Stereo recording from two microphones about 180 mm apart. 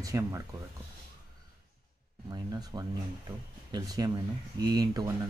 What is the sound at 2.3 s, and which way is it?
Speech, 20° right (ahead or behind).